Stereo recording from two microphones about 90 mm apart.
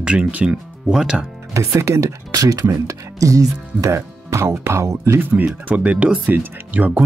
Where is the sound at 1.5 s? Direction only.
35° right (ahead or behind).